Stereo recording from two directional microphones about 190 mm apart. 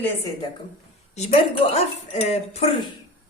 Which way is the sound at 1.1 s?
35° left (ahead or behind).